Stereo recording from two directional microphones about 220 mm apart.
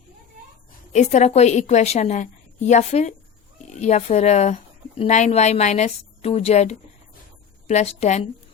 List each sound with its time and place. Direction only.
0.9 s a woman's voice: 30° left (ahead or behind)